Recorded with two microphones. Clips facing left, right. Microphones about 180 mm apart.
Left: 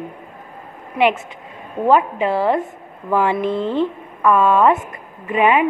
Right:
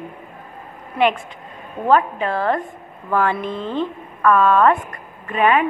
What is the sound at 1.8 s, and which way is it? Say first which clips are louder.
Speech: left 2 dB; 15° left (ahead or behind).